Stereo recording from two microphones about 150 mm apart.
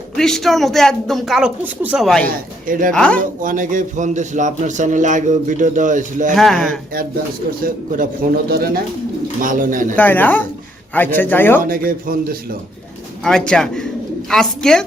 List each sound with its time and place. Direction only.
0.2 s speech: centre (ahead or behind)
2.0 s speech: 5° left (ahead or behind)
2.6 s a man's voice: 65° right (ahead or behind)
2.9 s a man's voice: 5° left (ahead or behind)
3.2 s a man's voice: 60° right (ahead or behind)
6.3 s speech: centre (ahead or behind)
7.6 s a man's voice: 65° right (ahead or behind)
8.4 s speech: 90° right
9.4 s a man's voice: 65° right (ahead or behind)
9.9 s a man's voice: 10° left (ahead or behind)
11.6 s a man's voice: 75° right (ahead or behind)
13.2 s speech: 5° left (ahead or behind)